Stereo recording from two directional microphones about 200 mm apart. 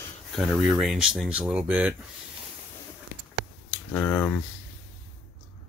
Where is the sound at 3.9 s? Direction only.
10° left (ahead or behind).